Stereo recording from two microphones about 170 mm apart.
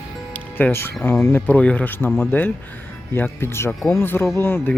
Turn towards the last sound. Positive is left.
turn(degrees=10)  # may be behind; listen again after turning